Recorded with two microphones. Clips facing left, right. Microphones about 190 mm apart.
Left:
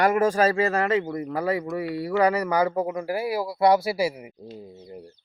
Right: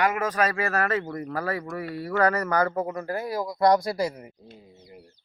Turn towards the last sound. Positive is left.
turn(degrees=10)  # may be behind; listen again after turning